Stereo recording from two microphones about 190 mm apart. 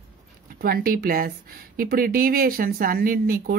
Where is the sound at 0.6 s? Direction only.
50° right (ahead or behind).